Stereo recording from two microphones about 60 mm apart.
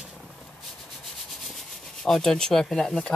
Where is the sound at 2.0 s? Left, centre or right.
Centre.